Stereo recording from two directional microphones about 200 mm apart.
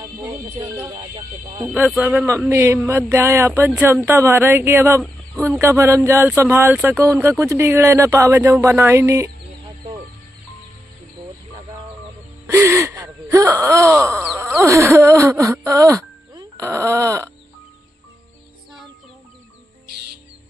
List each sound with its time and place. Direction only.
0.2 s speech: 15° right (ahead or behind)
12.4 s gasp: 15° right (ahead or behind)
14.1 s speech: 10° right (ahead or behind)